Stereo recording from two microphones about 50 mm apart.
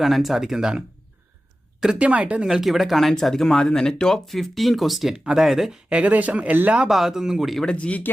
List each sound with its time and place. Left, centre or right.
0.0 s speech: centre
2.0 s speech: right
2.5 s speech: centre
5.9 s speech: right
6.8 s speech: centre
7.5 s speech: centre
7.8 s speech: left